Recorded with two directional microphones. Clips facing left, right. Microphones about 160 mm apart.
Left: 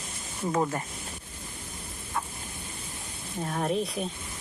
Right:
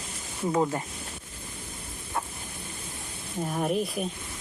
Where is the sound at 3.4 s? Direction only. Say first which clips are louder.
Right 1 dB; 5° right (ahead or behind).